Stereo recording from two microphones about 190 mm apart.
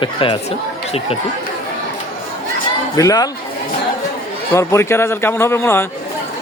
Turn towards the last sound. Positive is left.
turn(degrees=15)  # may be behind; listen again after turning